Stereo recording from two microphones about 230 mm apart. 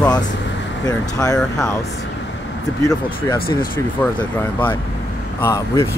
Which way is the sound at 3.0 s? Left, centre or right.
Left.